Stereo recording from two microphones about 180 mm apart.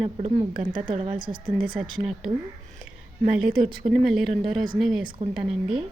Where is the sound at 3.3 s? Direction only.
5° right (ahead or behind).